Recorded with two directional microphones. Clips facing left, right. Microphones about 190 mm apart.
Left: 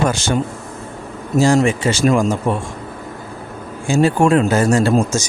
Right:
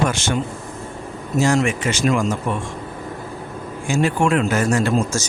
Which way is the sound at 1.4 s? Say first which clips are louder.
Left 4 dB; 30° left (ahead or behind).